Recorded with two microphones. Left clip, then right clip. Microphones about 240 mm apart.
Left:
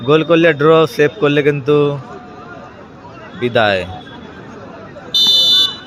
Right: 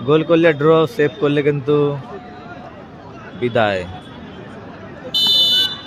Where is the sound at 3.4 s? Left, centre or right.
Centre.